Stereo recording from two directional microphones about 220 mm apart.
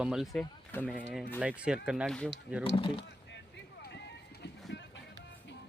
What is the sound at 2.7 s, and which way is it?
Speech, 25° left (ahead or behind).